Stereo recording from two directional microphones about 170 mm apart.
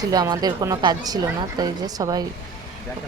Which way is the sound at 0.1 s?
25° right (ahead or behind).